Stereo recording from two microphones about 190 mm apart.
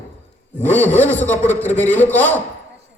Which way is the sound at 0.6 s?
10° left (ahead or behind).